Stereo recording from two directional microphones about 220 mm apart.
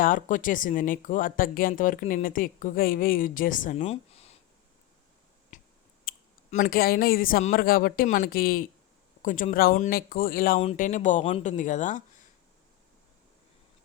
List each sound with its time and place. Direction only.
0.0 s speech: 35° left (ahead or behind)
5.5 s finger snapping: 35° left (ahead or behind)
6.1 s speech: 40° left (ahead or behind)